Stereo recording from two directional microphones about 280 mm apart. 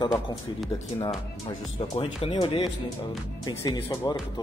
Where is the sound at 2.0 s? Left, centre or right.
Centre.